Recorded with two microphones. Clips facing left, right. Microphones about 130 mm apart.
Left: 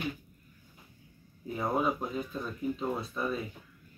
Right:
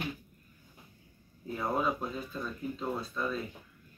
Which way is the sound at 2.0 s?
20° left (ahead or behind).